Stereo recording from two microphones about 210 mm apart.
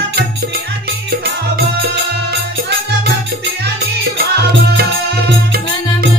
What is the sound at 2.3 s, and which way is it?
Music, 50° right (ahead or behind).